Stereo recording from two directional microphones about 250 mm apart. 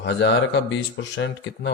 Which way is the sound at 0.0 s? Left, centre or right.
Left.